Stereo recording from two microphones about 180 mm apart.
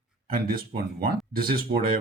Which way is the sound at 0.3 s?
55° right (ahead or behind).